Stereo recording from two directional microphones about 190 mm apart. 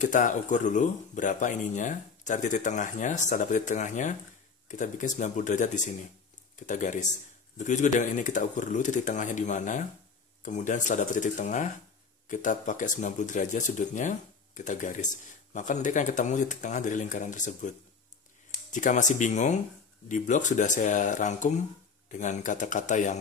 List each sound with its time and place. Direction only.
0.0 s speech: 40° left (ahead or behind)